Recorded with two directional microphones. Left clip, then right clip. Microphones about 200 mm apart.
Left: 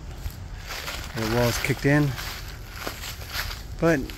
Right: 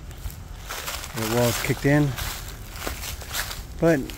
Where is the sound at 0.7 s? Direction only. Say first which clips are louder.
Right 1 dB; centre (ahead or behind).